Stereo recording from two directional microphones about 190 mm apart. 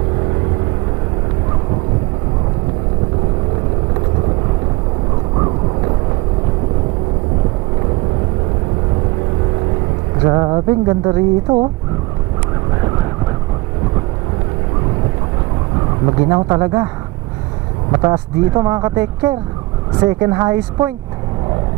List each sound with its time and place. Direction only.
10.2 s speech: 20° right (ahead or behind)
16.1 s speech: 20° right (ahead or behind)
17.9 s speech: 20° right (ahead or behind)